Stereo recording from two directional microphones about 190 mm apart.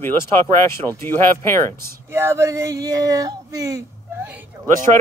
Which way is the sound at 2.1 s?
15° right (ahead or behind).